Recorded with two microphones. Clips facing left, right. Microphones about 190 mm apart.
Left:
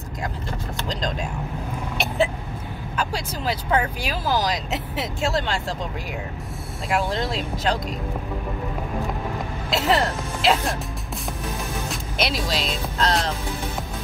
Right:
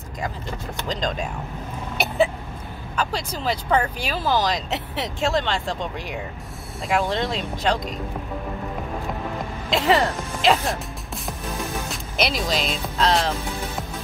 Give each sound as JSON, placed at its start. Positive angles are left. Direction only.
{"t": 0.7, "sound": "speech", "side_deg": 0}
{"t": 3.1, "sound": "speech", "side_deg": 10}
{"t": 6.9, "sound": "speech", "side_deg": 0}
{"t": 9.7, "sound": "speech", "side_deg": 0}
{"t": 11.9, "sound": "speech", "side_deg": 0}